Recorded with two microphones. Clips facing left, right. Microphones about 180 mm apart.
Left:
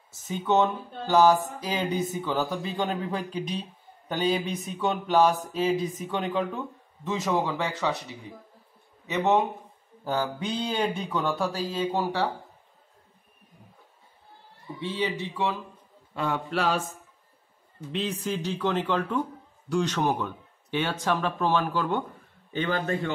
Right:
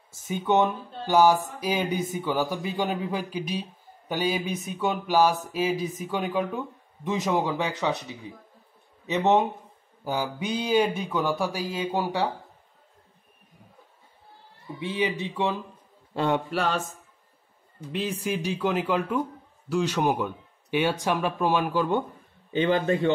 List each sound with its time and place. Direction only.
0.3 s speech: 15° right (ahead or behind)
14.8 s a man's voice: 15° right (ahead or behind)
16.4 s speech: centre (ahead or behind)
17.9 s a man's voice: 10° right (ahead or behind)